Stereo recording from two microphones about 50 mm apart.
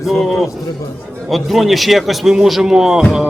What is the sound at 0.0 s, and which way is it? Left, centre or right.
A man's voice, centre.